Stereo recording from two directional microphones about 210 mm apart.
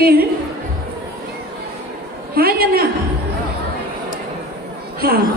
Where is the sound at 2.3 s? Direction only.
45° right (ahead or behind).